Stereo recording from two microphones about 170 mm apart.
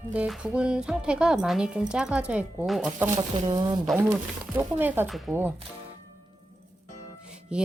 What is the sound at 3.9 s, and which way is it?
Speech, 10° right (ahead or behind).